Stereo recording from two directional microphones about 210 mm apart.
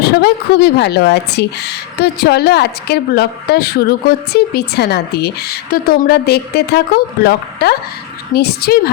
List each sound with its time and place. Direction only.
0.0 s speech: 50° left (ahead or behind)